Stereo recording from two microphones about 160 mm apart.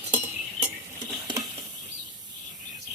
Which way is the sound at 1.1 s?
20° right (ahead or behind).